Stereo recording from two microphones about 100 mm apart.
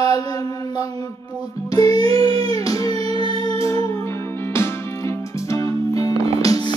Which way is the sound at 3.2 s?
65° right (ahead or behind).